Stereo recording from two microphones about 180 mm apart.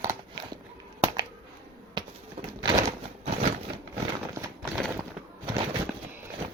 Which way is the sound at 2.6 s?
20° right (ahead or behind).